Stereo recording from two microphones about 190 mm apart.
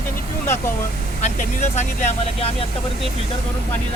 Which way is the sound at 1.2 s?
35° left (ahead or behind).